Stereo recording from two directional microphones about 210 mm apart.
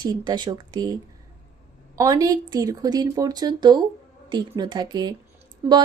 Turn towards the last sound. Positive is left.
turn(degrees=-10)  # may be behind; listen again after turning